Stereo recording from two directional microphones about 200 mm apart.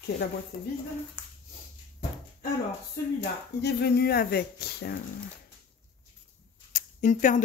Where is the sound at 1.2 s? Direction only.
5° right (ahead or behind).